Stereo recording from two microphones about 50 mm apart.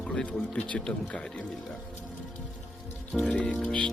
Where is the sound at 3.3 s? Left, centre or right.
Left.